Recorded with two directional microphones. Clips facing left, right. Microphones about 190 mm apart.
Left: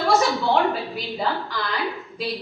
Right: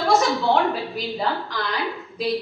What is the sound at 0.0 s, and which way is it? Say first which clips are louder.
A woman's voice: right 1 dB; centre (ahead or behind).